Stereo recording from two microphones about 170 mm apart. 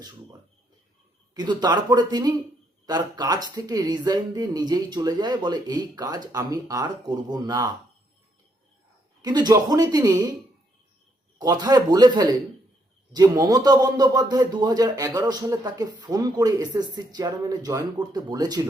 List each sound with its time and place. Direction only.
1.3 s a man's voice: 25° right (ahead or behind)
9.2 s a man's voice: 25° right (ahead or behind)
11.3 s a man's voice: 20° right (ahead or behind)